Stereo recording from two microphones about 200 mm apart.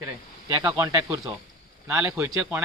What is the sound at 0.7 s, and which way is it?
A man's voice, 10° right (ahead or behind).